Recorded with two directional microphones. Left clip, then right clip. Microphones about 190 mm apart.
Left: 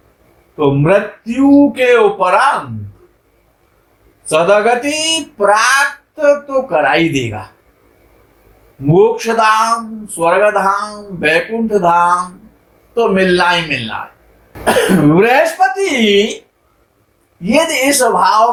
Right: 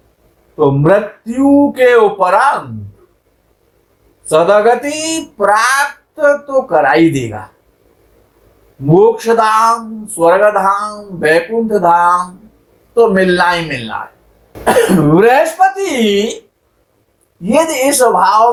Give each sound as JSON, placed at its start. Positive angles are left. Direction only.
{"t": 0.5, "sound": "speech", "side_deg": -30}
{"t": 4.3, "sound": "speech", "side_deg": -30}
{"t": 8.9, "sound": "speech", "side_deg": -30}
{"t": 17.4, "sound": "speech", "side_deg": -25}